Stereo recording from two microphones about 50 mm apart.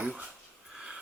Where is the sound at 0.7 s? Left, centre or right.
Centre.